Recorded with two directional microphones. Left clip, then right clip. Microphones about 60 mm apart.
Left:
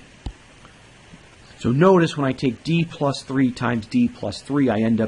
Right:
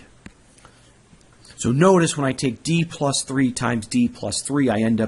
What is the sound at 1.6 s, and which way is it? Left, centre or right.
Speech, right.